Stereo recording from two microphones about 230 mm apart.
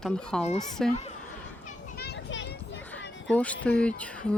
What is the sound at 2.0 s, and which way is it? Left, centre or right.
Children playing, left.